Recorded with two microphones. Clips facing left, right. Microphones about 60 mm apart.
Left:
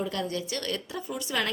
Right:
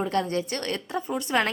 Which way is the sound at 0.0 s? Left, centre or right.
Right.